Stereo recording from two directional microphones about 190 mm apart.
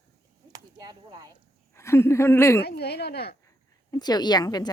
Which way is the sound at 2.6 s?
60° left (ahead or behind).